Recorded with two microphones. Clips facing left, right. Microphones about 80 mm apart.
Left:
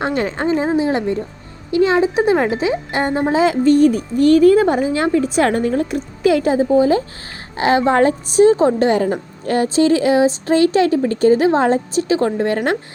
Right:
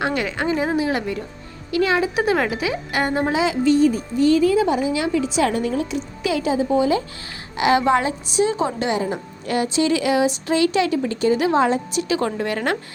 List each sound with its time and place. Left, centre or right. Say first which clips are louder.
0.0 s speech: left 3 dB; left
3.3 s speech: left 6 dB; left